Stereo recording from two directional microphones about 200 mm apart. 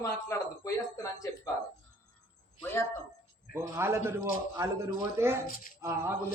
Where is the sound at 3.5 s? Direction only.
10° right (ahead or behind).